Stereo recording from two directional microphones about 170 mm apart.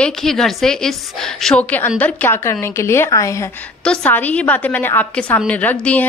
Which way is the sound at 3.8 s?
5° left (ahead or behind).